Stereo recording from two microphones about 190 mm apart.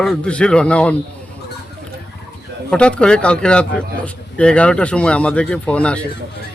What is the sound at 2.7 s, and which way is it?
Speech, 5° left (ahead or behind).